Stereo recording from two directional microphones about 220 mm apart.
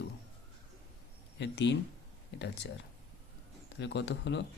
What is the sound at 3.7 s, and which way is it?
Speech, 55° left (ahead or behind).